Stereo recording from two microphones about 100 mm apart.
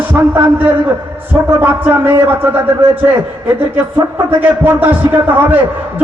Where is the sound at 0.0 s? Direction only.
20° right (ahead or behind).